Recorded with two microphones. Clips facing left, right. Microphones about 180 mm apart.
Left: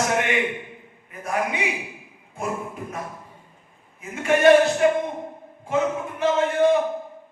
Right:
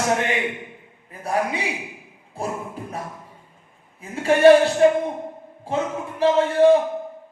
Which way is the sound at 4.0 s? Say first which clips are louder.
Right 3 dB; 30° right (ahead or behind).